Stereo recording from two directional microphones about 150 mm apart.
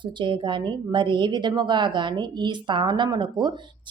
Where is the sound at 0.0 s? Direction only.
30° right (ahead or behind).